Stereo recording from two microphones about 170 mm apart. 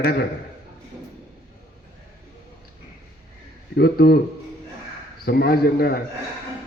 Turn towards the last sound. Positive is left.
turn(degrees=70)  # may be behind; listen again after turning